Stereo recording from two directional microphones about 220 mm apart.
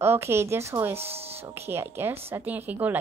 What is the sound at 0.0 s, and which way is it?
Speech, 10° right (ahead or behind).